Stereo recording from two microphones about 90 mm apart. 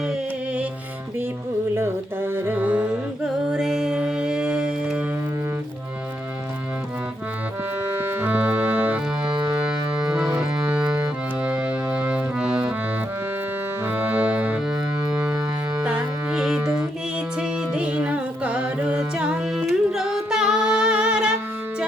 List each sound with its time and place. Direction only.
1.7 s music: 25° right (ahead or behind)
3.5 s music: 5° right (ahead or behind)
7.9 s music: 25° right (ahead or behind)
9.3 s music: 50° right (ahead or behind)
10.3 s music: 15° right (ahead or behind)
13.9 s music: 15° right (ahead or behind)
15.8 s music: 10° right (ahead or behind)
17.7 s music: 15° right (ahead or behind)